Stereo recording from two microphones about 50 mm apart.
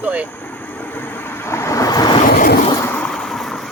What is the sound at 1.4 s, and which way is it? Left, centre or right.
Vehicle, left.